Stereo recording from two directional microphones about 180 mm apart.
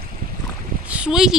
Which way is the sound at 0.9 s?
5° right (ahead or behind).